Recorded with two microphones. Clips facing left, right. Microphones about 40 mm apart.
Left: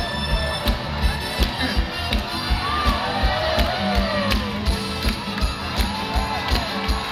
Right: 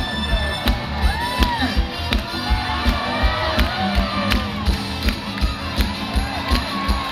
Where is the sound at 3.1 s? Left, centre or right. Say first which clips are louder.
Right 1 dB; centre.